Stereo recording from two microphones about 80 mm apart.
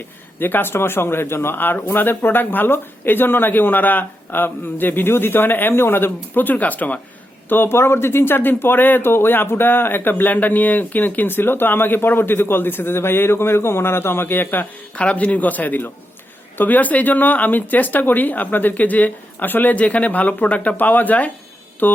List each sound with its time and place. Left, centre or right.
0.3 s speech: left